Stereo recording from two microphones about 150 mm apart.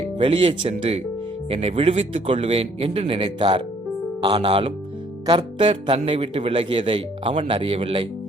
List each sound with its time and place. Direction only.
0.2 s a man's voice: 40° right (ahead or behind)